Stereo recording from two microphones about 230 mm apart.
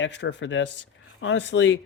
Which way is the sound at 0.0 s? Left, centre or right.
Left.